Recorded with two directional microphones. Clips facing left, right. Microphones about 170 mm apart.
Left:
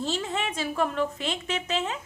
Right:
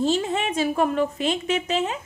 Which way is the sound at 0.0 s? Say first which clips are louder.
Right 7 dB; 15° right (ahead or behind).